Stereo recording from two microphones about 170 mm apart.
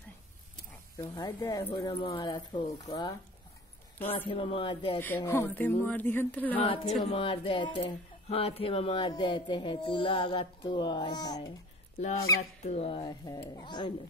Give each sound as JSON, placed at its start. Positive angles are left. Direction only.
{"t": 0.9, "sound": "speech", "side_deg": 20}
{"t": 1.8, "sound": "speech", "side_deg": 30}
{"t": 4.9, "sound": "speech", "side_deg": 10}
{"t": 6.6, "sound": "speech", "side_deg": 30}
{"t": 12.4, "sound": "speech", "side_deg": 40}